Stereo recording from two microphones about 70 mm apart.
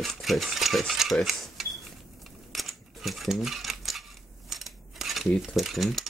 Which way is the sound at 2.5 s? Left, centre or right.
Centre.